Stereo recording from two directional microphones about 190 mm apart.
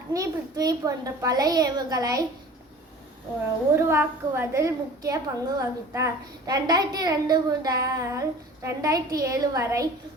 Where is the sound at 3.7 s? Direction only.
10° right (ahead or behind).